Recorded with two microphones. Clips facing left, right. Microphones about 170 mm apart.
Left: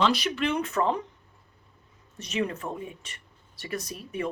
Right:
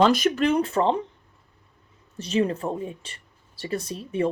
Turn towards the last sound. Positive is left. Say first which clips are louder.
# right 7 dB
turn(degrees=-30)  # may be behind; listen again after turning